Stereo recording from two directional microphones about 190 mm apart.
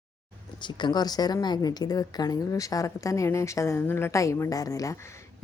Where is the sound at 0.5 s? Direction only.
25° left (ahead or behind).